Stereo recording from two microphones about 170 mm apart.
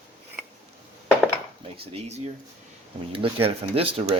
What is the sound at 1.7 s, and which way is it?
Speech, 35° right (ahead or behind).